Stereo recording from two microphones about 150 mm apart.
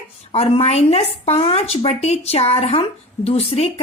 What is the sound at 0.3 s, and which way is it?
A woman's voice, 40° left (ahead or behind).